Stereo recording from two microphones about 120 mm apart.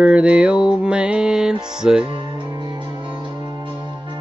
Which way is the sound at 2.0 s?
45° right (ahead or behind).